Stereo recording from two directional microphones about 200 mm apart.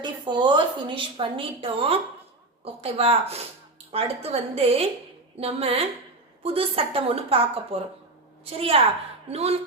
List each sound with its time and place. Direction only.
0.0 s a woman's voice: 20° right (ahead or behind)